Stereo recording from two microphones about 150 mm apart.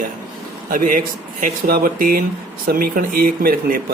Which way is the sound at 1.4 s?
80° right.